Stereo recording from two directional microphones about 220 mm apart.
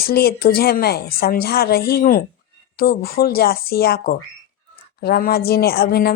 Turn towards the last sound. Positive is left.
turn(degrees=45)  # may be behind; listen again after turning